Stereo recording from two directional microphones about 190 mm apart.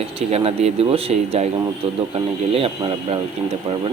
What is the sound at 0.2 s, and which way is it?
Speech, 35° right (ahead or behind).